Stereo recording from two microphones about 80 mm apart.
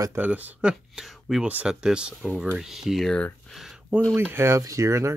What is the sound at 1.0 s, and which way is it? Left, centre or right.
Speech, centre.